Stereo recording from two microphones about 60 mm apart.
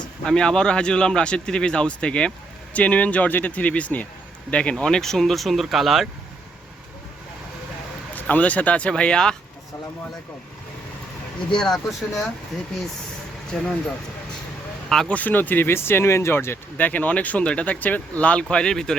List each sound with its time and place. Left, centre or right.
0.3 s speech: centre
8.1 s speech: left
11.5 s speech: centre
13.5 s speech: centre
15.0 s speech: left
16.7 s speech: left
18.5 s speech: centre